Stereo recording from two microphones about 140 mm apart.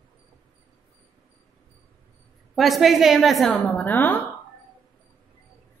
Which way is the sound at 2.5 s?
Centre (ahead or behind).